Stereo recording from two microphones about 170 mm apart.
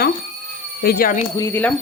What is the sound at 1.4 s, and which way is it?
Speech, 10° left (ahead or behind).